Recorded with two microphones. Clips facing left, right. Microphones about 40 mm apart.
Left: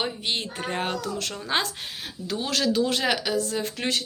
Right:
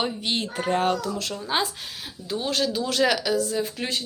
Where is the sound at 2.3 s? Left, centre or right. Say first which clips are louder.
Even; left.